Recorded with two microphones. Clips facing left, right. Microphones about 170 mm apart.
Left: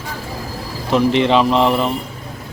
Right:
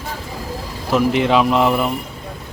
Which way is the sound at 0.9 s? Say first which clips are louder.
Left 1 dB; 5° right (ahead or behind).